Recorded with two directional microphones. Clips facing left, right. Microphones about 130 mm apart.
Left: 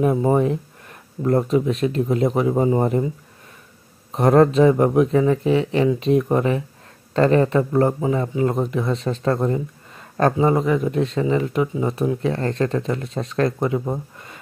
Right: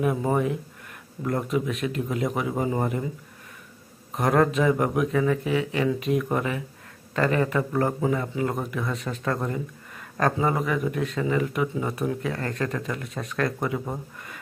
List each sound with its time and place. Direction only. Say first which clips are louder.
0.0 s speech: left 6 dB; 30° left (ahead or behind)
4.1 s speech: left 7 dB; 30° left (ahead or behind)